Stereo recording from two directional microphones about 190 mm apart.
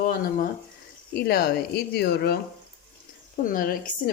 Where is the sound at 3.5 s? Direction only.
45° left (ahead or behind).